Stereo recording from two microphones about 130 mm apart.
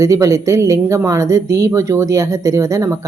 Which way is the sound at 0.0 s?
25° right (ahead or behind).